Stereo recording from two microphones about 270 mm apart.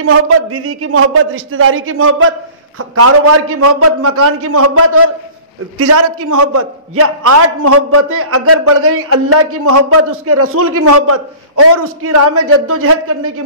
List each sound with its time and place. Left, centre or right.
0.0 s a man's voice: right